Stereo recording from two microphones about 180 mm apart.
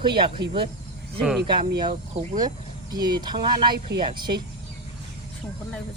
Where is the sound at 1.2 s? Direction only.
Centre (ahead or behind).